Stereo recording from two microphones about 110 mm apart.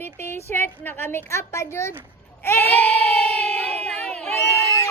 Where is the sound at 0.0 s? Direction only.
20° left (ahead or behind).